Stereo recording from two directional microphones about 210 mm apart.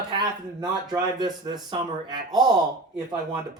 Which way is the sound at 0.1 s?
20° right (ahead or behind).